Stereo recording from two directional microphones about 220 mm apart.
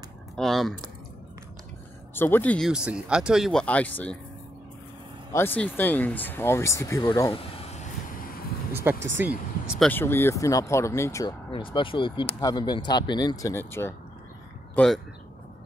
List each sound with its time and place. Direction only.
0.4 s speech: centre (ahead or behind)
2.1 s speech: 10° left (ahead or behind)
2.7 s speech: 5° right (ahead or behind)
5.3 s speech: 10° left (ahead or behind)
7.3 s vehicle: 25° left (ahead or behind)
8.8 s speech: 10° right (ahead or behind)
9.8 s speech: 10° left (ahead or behind)